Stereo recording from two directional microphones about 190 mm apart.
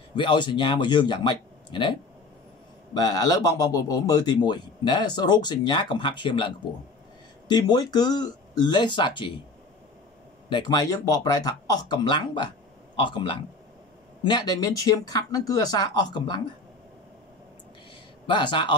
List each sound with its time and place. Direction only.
0.1 s a man's voice: 25° left (ahead or behind)
10.5 s a man's voice: 20° left (ahead or behind)
18.2 s a man's voice: 25° left (ahead or behind)